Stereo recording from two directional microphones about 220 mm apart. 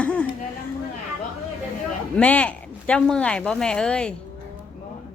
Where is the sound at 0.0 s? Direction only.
5° left (ahead or behind).